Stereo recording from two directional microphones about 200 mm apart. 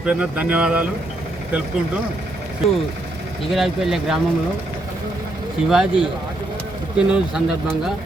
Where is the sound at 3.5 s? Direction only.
Centre (ahead or behind).